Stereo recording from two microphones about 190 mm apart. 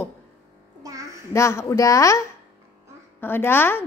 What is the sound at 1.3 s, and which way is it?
Speech, 15° left (ahead or behind).